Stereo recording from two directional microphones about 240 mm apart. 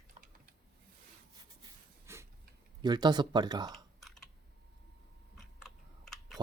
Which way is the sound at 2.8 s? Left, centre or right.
Centre.